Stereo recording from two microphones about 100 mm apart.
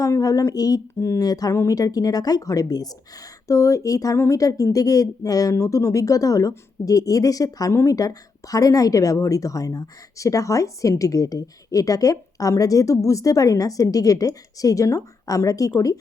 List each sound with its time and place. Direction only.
0.0 s speech: 35° left (ahead or behind)